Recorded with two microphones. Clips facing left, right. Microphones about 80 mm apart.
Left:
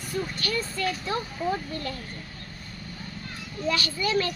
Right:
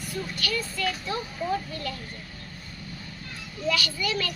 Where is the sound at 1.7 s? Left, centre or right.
Left.